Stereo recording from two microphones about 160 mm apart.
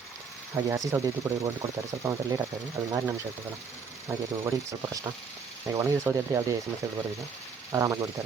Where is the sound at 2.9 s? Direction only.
15° right (ahead or behind).